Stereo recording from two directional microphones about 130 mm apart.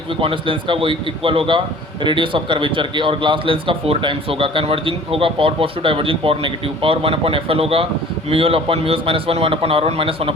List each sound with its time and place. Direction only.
0.2 s a man's voice: 45° right (ahead or behind)